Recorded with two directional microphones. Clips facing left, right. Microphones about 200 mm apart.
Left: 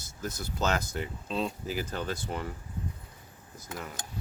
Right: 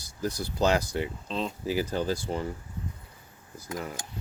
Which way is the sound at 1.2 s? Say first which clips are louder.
Even; 5° left (ahead or behind).